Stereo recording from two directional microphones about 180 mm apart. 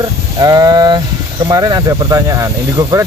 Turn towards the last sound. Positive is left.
turn(degrees=-15)  # may be behind; listen again after turning